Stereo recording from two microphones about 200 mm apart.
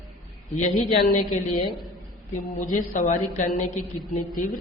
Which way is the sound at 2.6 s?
40° left (ahead or behind).